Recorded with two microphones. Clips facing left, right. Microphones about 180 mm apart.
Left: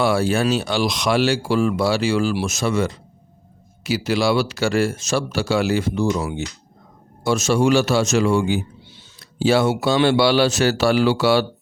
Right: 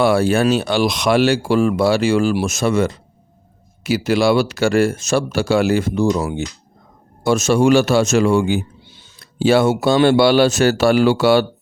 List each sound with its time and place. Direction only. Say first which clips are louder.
0.0 s speech: right 4 dB; 55° right (ahead or behind)